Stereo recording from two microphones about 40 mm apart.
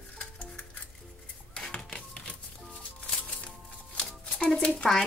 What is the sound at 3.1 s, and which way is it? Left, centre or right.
Music, left.